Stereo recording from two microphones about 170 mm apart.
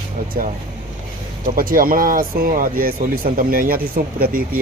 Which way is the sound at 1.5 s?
55° right (ahead or behind).